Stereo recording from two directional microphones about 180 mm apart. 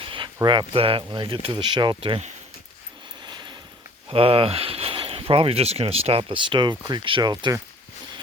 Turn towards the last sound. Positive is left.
turn(degrees=-25)  # may be behind; listen again after turning